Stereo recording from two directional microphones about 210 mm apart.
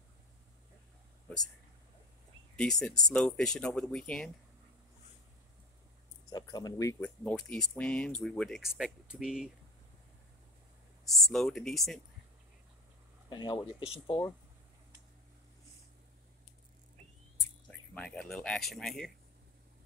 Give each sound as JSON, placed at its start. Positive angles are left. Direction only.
{"t": 2.5, "sound": "speech", "side_deg": 5}
{"t": 6.3, "sound": "speech", "side_deg": 20}
{"t": 11.1, "sound": "speech", "side_deg": 0}
{"t": 13.3, "sound": "speech", "side_deg": 20}
{"t": 17.6, "sound": "speech", "side_deg": 5}